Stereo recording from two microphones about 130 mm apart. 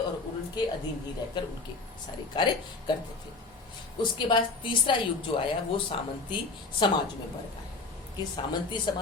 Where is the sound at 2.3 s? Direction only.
40° left (ahead or behind).